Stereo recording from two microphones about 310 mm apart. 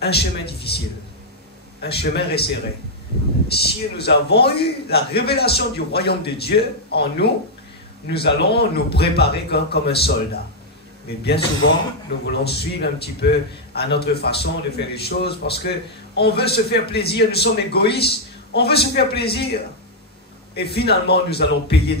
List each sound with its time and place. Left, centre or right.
0.0 s a man's voice: left
3.5 s a man's voice: left
12.3 s a man's voice: left